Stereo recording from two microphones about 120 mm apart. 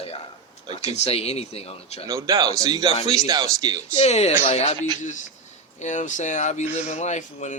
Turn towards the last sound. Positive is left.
turn(degrees=80)